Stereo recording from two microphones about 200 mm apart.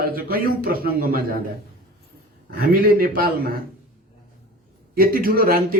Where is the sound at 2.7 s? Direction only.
45° right (ahead or behind).